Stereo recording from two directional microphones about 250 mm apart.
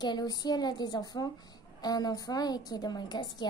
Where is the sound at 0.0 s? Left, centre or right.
Centre.